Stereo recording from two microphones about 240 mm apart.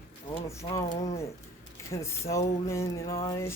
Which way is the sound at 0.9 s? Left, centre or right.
Left.